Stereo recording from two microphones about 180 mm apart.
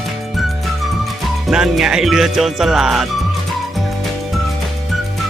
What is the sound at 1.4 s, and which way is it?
Speech, centre (ahead or behind).